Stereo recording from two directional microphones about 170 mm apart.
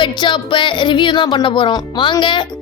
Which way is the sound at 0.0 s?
25° left (ahead or behind).